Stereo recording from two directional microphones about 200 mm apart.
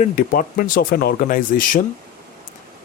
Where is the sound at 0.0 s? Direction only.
45° left (ahead or behind).